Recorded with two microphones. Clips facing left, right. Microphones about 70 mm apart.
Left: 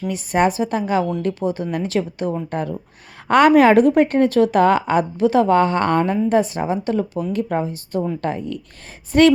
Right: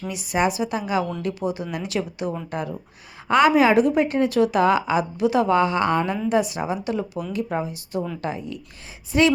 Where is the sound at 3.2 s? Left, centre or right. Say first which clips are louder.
Left 4 dB; left.